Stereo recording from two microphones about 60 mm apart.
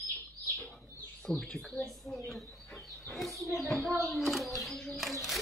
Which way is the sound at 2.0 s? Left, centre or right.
Centre.